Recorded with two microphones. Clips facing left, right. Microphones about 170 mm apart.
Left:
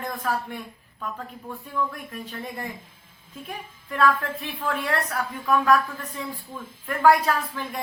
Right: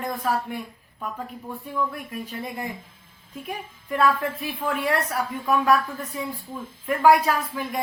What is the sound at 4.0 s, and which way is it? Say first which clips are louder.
Speech: even; 10° right (ahead or behind).